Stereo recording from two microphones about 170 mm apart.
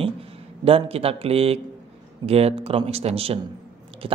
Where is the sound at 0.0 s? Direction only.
35° right (ahead or behind).